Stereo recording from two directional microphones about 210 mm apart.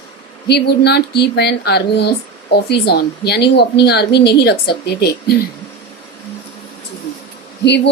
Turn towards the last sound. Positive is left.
turn(degrees=55)  # may be behind; listen again after turning